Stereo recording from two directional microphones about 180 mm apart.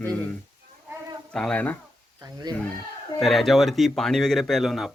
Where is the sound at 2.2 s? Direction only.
20° right (ahead or behind).